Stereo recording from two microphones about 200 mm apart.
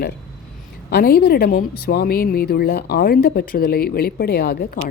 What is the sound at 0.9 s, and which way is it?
Speech, 50° left (ahead or behind).